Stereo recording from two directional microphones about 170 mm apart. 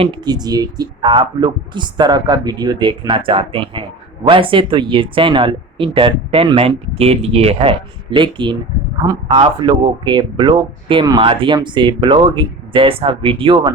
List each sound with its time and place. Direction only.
0.0 s speech: 25° right (ahead or behind)